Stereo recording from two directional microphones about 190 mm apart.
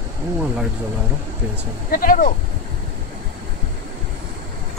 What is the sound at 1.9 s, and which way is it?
Speech, 45° left (ahead or behind).